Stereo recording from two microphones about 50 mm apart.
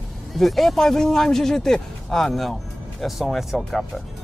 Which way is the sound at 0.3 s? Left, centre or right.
Centre.